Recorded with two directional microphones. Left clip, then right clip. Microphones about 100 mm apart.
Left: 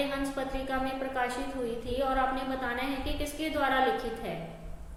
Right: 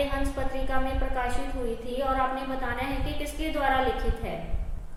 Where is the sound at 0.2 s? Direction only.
15° left (ahead or behind).